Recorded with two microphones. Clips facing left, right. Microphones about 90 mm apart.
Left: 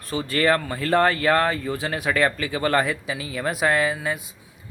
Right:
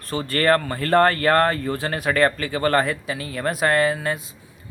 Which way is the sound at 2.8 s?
15° left (ahead or behind).